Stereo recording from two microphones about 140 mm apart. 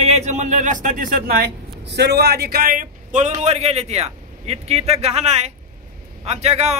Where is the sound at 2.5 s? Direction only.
90° right.